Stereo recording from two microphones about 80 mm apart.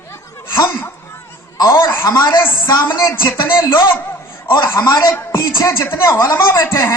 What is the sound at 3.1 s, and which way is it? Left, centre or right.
A man's voice, left.